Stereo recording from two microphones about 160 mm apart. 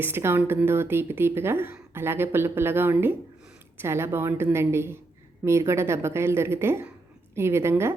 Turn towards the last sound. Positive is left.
turn(degrees=-15)  # may be behind; listen again after turning